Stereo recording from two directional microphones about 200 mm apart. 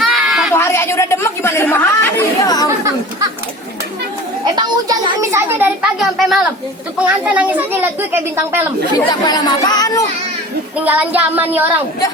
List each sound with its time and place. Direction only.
0.1 s a sound: centre (ahead or behind)
0.5 s speech: 10° left (ahead or behind)
4.5 s a child's voice: 20° right (ahead or behind)
9.0 s speech: 20° left (ahead or behind)
10.8 s a child's voice: 10° right (ahead or behind)